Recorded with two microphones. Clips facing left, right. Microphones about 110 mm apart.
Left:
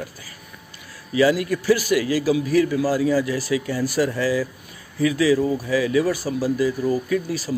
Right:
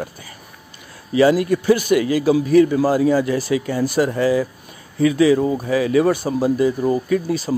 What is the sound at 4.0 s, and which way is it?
Speech, 40° right (ahead or behind).